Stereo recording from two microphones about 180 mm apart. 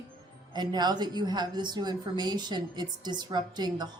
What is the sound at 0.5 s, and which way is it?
A woman's voice, 25° right (ahead or behind).